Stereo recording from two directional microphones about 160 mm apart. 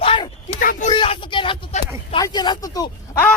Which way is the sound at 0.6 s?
55° left (ahead or behind).